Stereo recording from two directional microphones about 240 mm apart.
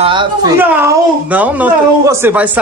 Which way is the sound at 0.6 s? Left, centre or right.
Centre.